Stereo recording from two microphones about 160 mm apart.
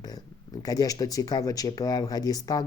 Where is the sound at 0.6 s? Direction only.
20° left (ahead or behind).